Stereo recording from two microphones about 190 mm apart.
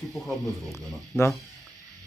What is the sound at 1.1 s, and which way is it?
Speech, centre (ahead or behind).